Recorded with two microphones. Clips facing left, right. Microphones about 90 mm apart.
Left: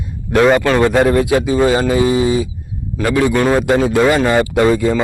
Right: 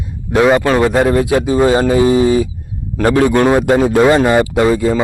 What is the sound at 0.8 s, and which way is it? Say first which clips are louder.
Speech: even; 5° right (ahead or behind).